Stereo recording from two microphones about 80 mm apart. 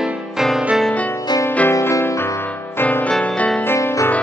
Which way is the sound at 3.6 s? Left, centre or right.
Left.